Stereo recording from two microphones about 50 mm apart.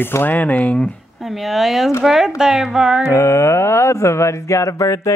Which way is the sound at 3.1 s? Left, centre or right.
Left.